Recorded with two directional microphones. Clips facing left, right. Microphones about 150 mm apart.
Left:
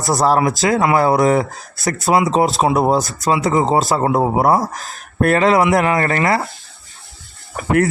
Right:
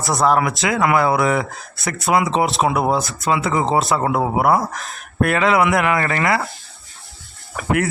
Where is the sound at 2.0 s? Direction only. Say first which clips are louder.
Left 2 dB; 25° left (ahead or behind).